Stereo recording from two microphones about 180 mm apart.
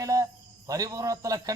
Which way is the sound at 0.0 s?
20° right (ahead or behind).